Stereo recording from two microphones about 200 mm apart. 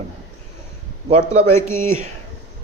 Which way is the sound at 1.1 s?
35° right (ahead or behind).